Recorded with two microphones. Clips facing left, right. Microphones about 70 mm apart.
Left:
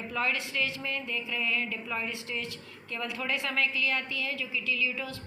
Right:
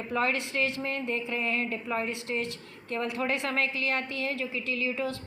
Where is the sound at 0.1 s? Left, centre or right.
Right.